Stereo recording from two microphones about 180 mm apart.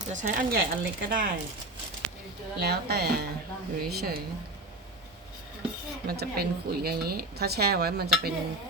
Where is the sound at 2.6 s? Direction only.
60° right (ahead or behind).